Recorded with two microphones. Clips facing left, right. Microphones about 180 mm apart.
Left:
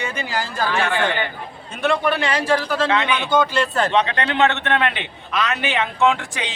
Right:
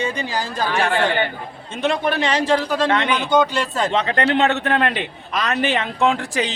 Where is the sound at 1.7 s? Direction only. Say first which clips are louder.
Even; 20° right (ahead or behind).